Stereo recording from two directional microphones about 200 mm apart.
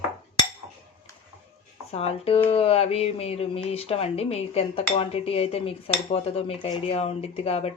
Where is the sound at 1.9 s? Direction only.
30° left (ahead or behind).